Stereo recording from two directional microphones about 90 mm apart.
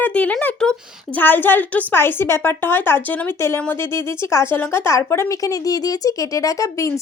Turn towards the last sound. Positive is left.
turn(degrees=35)  # may be behind; listen again after turning